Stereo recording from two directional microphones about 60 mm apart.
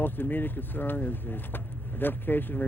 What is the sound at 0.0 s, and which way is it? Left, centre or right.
Speech, left.